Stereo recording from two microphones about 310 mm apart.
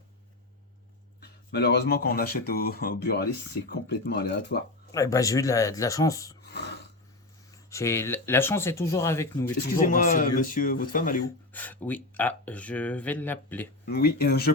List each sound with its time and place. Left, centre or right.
1.2 s speech: left
4.9 s speech: centre
7.5 s speech: centre
9.8 s speech: left
11.5 s speech: centre
13.8 s speech: left